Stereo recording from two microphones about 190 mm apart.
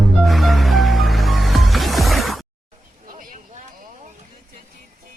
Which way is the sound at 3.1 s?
45° right (ahead or behind).